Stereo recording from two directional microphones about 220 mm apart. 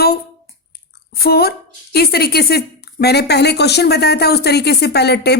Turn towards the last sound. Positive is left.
turn(degrees=50)  # may be behind; listen again after turning